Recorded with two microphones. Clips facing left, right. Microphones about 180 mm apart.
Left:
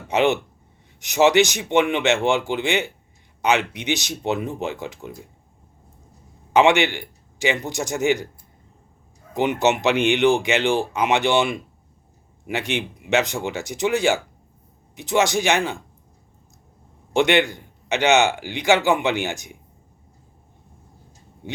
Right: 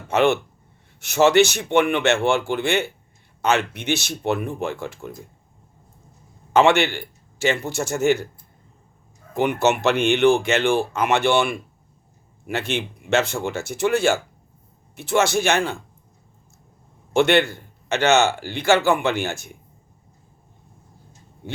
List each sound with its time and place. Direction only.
0.1 s a man's voice: 15° left (ahead or behind)
6.5 s speech: 15° left (ahead or behind)
9.3 s a man's voice: 15° left (ahead or behind)
17.2 s a man's voice: 15° left (ahead or behind)